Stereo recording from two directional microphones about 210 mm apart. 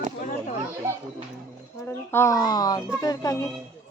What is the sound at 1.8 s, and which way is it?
Speech, 10° left (ahead or behind).